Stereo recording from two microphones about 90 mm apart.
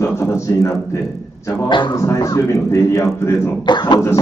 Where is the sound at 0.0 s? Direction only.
30° left (ahead or behind).